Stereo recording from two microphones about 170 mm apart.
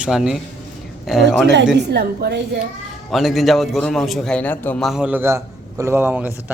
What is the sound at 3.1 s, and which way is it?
Speech, centre (ahead or behind).